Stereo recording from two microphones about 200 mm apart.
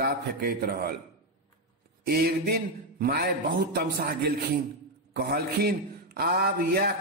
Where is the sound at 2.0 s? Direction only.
50° right (ahead or behind).